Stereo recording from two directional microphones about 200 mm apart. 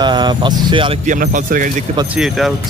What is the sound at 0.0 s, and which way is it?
Speech, 20° right (ahead or behind).